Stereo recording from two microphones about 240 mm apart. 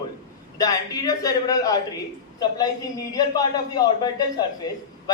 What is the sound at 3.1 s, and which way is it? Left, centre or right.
A man's voice, centre.